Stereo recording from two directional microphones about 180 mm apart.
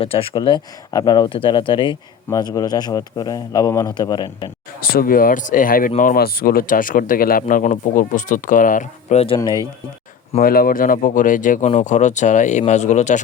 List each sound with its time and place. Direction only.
0.0 s speech: 30° left (ahead or behind)
4.8 s speech: 55° left (ahead or behind); by 9.4 s 35° left (ahead or behind)
10.4 s speech: 55° left (ahead or behind)